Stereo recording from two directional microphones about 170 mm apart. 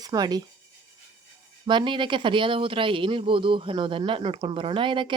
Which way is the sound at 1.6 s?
25° right (ahead or behind).